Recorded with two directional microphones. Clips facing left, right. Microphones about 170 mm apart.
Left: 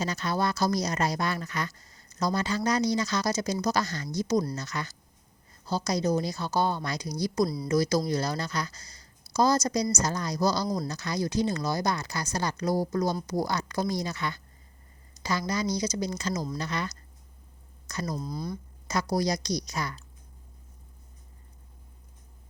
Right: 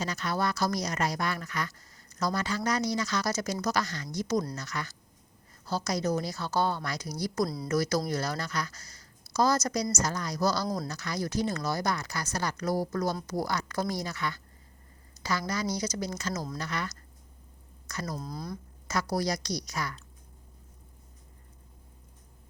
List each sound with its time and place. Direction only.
0.0 s a woman's voice: 25° left (ahead or behind)
18.2 s speech: centre (ahead or behind)
18.9 s speech: 15° left (ahead or behind)